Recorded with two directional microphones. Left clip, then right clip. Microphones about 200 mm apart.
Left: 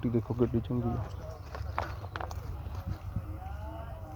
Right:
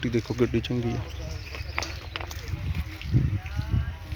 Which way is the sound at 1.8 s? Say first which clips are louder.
Right 4 dB; 15° right (ahead or behind).